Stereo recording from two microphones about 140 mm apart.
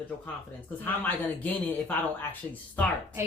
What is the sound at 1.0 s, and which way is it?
Speech, 10° left (ahead or behind).